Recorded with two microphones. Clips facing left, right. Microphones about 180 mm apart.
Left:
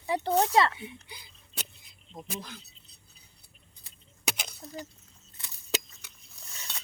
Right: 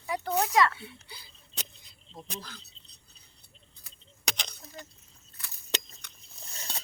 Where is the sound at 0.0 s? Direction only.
30° left (ahead or behind).